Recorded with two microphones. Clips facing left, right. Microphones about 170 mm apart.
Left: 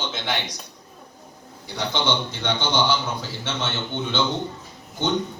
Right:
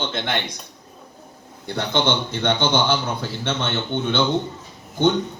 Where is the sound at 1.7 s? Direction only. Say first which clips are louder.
Right 3 dB; 55° right (ahead or behind).